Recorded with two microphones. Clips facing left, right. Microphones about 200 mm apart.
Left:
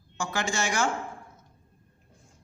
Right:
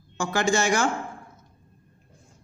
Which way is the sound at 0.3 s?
40° right (ahead or behind).